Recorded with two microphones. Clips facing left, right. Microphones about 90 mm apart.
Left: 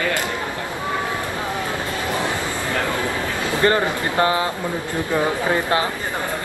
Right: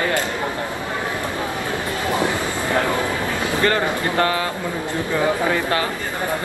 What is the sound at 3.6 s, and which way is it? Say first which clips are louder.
Speech: left 2 dB; 20° left (ahead or behind).